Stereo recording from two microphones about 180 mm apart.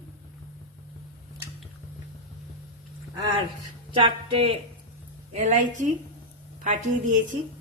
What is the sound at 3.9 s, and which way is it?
Speech, 30° right (ahead or behind).